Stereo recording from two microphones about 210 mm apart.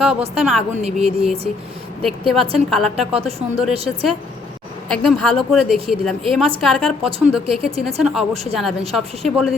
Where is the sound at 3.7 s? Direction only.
30° right (ahead or behind).